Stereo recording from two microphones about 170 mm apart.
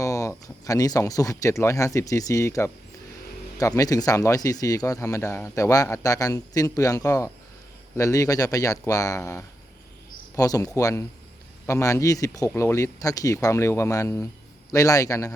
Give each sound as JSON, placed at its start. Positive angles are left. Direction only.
{"t": 0.0, "sound": "speech", "side_deg": 20}